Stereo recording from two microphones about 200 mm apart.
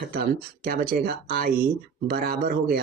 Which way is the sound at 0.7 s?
45° right (ahead or behind).